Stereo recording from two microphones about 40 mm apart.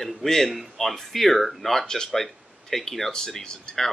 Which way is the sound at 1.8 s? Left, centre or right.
Centre.